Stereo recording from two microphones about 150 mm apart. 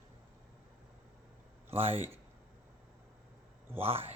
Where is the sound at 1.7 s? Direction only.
40° right (ahead or behind).